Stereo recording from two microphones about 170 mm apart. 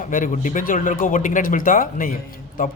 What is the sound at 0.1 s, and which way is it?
A man's voice, 50° left (ahead or behind).